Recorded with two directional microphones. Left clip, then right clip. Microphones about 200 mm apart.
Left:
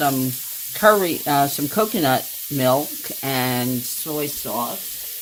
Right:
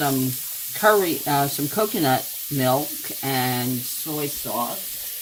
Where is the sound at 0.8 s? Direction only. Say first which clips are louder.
Left 2 dB; 60° left (ahead or behind).